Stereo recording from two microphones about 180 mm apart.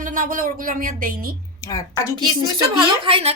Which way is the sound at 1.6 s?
20° left (ahead or behind).